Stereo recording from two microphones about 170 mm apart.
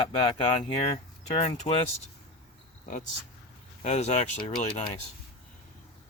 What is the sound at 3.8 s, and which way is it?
Speech, 40° left (ahead or behind).